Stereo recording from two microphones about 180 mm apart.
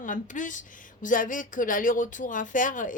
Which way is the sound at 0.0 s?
45° left (ahead or behind).